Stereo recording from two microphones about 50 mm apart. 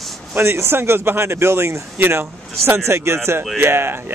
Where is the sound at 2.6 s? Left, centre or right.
Right.